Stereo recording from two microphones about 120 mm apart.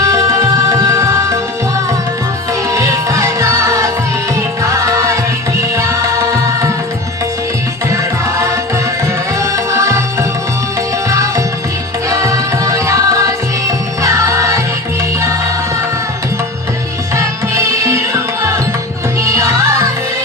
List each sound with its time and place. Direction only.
0.0 s music: 25° right (ahead or behind)
2.5 s music: 25° right (ahead or behind)
9.4 s music: 25° right (ahead or behind)
17.2 s music: 25° right (ahead or behind)